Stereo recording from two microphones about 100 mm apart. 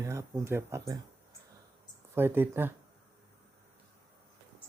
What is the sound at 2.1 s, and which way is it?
Speech, 20° right (ahead or behind).